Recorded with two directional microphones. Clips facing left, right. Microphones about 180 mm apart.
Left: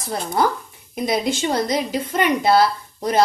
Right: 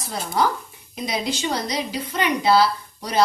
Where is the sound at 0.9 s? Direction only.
50° left (ahead or behind).